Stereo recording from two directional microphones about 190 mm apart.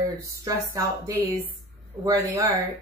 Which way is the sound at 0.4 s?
15° right (ahead or behind).